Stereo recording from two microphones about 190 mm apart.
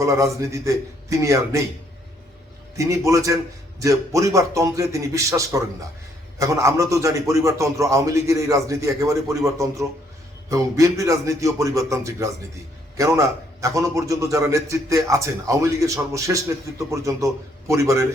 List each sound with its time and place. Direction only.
0.0 s a man's voice: 15° right (ahead or behind)
2.7 s a man's voice: 15° right (ahead or behind)